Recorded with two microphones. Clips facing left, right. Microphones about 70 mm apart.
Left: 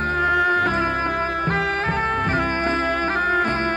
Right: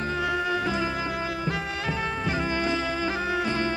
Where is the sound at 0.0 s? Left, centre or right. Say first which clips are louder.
Left 8 dB; left.